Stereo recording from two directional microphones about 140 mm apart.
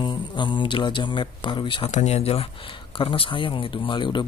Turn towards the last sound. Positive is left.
turn(degrees=35)  # may be behind; listen again after turning